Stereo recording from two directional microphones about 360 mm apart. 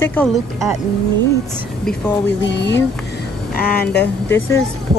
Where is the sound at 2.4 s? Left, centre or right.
Left.